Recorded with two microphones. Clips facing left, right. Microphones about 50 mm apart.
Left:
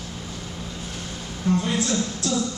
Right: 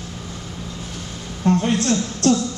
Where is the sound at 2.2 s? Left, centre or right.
Right.